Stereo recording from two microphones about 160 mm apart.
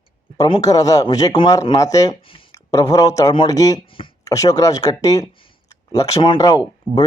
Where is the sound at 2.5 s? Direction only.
20° left (ahead or behind).